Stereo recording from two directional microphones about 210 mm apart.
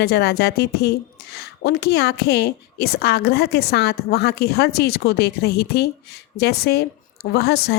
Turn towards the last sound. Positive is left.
turn(degrees=50)  # may be behind; listen again after turning